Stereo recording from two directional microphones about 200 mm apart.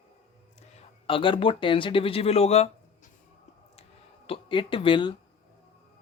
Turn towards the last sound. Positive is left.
turn(degrees=25)  # may be behind; listen again after turning